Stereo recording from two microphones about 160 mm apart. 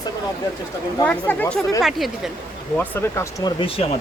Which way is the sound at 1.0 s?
10° left (ahead or behind).